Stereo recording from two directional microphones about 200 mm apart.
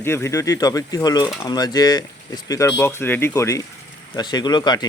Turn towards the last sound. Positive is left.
turn(degrees=20)  # may be behind; listen again after turning